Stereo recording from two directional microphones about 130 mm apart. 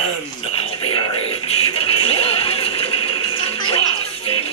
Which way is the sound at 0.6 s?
40° left (ahead or behind).